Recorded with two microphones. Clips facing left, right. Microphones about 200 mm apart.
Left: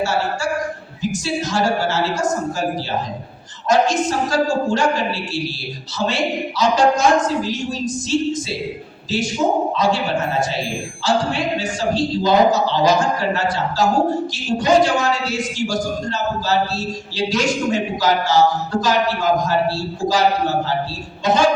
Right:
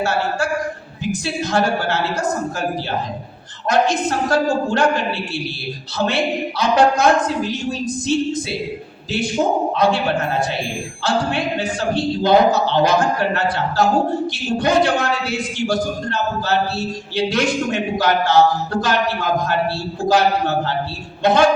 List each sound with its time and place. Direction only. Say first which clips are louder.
0.0 s a man's voice: even; 60° right (ahead or behind)
3.7 s a man's voice: left 1 dB; 60° right (ahead or behind)